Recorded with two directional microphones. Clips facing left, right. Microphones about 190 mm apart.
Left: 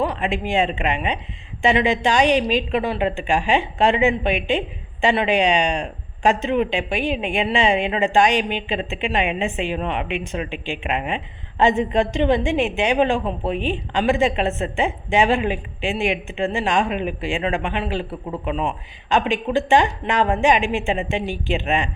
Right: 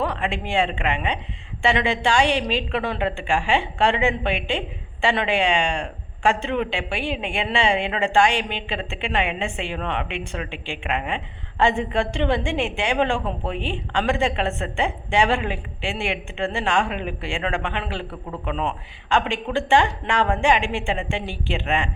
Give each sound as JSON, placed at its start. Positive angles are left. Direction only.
{"t": 0.0, "sound": "a woman's voice", "side_deg": 15}